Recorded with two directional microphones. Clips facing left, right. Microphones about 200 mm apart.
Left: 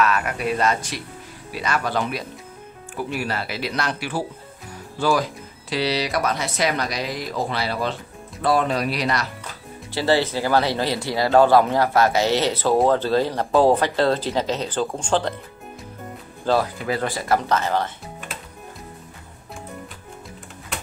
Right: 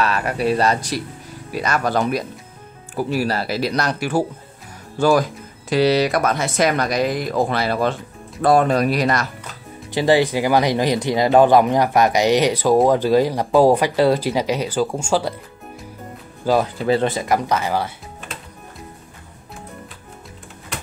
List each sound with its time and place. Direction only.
0.0 s speech: 30° right (ahead or behind); by 9.3 s 50° right (ahead or behind)
9.9 s speech: 15° right (ahead or behind)
16.5 s speech: 10° right (ahead or behind)
16.8 s speech: 25° right (ahead or behind); by 17.9 s 10° right (ahead or behind)